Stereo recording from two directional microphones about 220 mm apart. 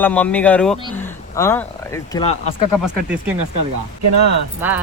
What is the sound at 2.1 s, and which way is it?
Speech, 25° left (ahead or behind).